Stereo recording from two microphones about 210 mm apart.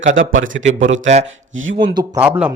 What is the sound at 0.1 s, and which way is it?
Speech, 65° right (ahead or behind).